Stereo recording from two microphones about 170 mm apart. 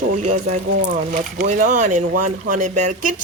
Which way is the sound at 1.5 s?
50° right (ahead or behind).